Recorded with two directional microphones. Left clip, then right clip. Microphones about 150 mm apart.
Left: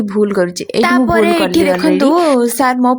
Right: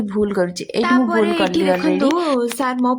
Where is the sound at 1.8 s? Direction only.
40° left (ahead or behind).